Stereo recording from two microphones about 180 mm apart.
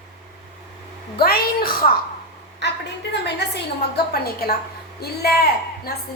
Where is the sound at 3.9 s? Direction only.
60° left (ahead or behind).